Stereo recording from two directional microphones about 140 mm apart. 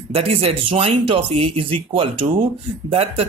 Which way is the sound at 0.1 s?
45° right (ahead or behind).